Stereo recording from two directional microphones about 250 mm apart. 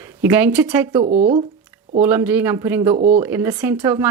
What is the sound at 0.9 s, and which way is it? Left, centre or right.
Speech, right.